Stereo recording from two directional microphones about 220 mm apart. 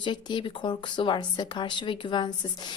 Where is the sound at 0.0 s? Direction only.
20° left (ahead or behind).